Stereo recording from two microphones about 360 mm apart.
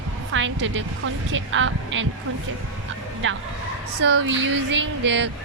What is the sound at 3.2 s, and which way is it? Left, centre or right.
A woman's voice, right.